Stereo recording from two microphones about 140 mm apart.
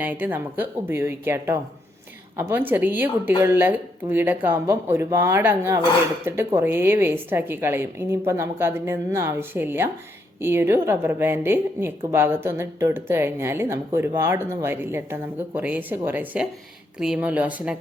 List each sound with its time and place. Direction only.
0.0 s a woman's voice: 10° right (ahead or behind)